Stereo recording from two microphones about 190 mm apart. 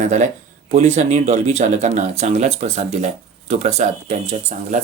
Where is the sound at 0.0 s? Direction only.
40° right (ahead or behind).